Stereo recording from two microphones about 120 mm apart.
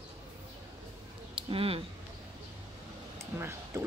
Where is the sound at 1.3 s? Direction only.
50° right (ahead or behind).